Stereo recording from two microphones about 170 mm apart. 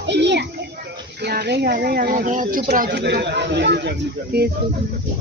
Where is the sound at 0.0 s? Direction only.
90° right.